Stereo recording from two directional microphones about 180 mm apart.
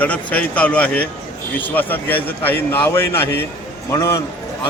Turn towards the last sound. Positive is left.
turn(degrees=15)  # may be behind; listen again after turning